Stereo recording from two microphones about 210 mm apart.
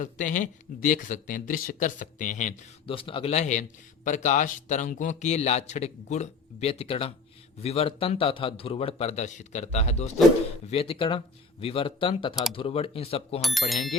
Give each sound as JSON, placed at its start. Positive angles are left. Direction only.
{"t": 0.0, "sound": "a man's voice", "side_deg": 35}
{"t": 2.9, "sound": "a man's voice", "side_deg": 25}
{"t": 13.4, "sound": "speech", "side_deg": 0}